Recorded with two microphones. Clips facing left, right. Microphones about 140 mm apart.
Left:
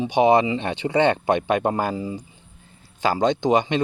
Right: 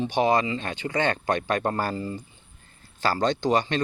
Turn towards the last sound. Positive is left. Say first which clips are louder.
# left 4 dB
turn(degrees=20)  # may be behind; listen again after turning